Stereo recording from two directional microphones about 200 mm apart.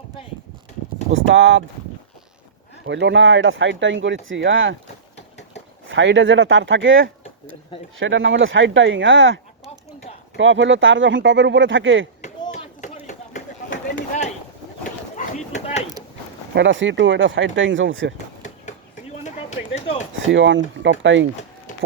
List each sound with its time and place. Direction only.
1.1 s speech: 70° right (ahead or behind)
2.8 s speech: 65° right (ahead or behind)
5.9 s speech: 65° right (ahead or behind)
12.2 s chop: 35° left (ahead or behind)
15.1 s run: 35° left (ahead or behind)
16.6 s speech: 65° right (ahead or behind)
19.2 s a sound: 35° left (ahead or behind)
20.3 s speech: 65° right (ahead or behind)
21.7 s a sound: 40° left (ahead or behind)